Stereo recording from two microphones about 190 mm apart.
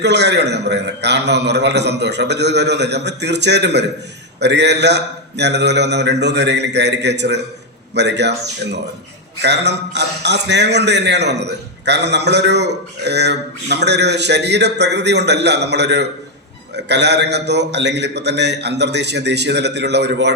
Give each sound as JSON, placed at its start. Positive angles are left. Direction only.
{"t": 0.0, "sound": "a man's voice", "side_deg": -65}